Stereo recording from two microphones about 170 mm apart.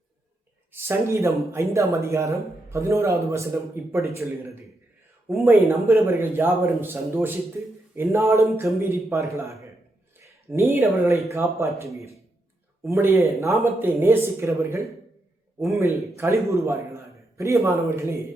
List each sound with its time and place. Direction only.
0.7 s a man's voice: 15° right (ahead or behind)
5.3 s a man's voice: 15° right (ahead or behind)